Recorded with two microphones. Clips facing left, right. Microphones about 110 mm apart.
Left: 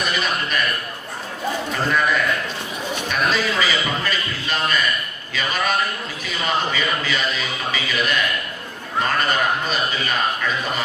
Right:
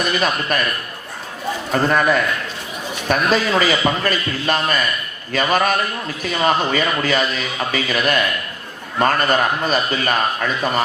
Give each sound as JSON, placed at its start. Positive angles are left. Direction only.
{"t": 0.5, "sound": "a man's voice", "side_deg": -45}
{"t": 1.7, "sound": "a man's voice", "side_deg": -45}